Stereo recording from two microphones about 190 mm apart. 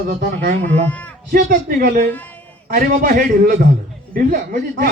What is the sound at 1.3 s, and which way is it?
A woman's voice, 50° right (ahead or behind).